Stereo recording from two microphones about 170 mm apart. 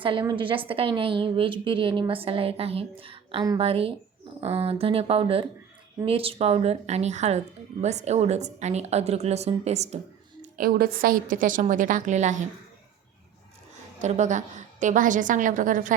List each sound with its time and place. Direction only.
0.0 s a woman's voice: 30° right (ahead or behind)
10.4 s a woman's voice: 60° right (ahead or behind)
14.0 s a woman's voice: 45° right (ahead or behind)